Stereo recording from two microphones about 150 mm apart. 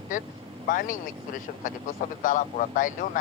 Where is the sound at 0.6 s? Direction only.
60° left (ahead or behind).